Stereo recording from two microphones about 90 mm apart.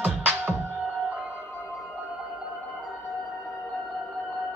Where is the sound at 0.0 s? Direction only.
20° right (ahead or behind).